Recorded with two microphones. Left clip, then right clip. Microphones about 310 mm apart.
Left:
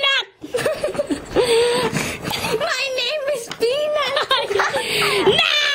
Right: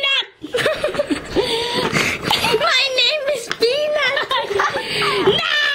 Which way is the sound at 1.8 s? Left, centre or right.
Centre.